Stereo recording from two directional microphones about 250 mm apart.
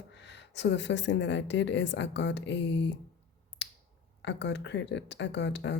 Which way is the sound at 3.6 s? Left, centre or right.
Left.